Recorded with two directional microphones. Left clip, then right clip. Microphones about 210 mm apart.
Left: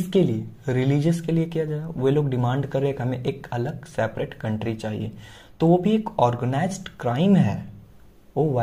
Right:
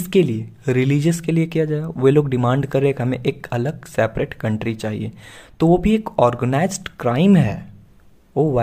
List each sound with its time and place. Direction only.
0.0 s speech: 30° right (ahead or behind)